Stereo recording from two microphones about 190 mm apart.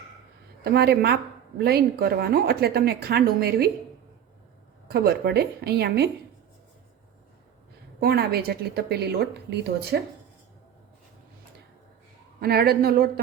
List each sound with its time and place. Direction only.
0.6 s a woman's voice: 55° right (ahead or behind)
4.9 s a woman's voice: 55° right (ahead or behind)
8.0 s a woman's voice: 55° right (ahead or behind)
12.4 s speech: 55° right (ahead or behind)